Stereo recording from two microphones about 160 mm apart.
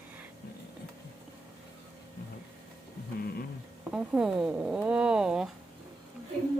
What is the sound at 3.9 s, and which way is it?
Speech, 5° right (ahead or behind).